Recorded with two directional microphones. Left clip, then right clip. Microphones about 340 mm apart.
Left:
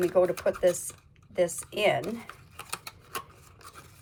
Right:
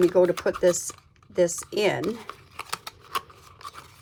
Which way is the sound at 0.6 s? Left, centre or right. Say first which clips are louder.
Right 3 dB; centre.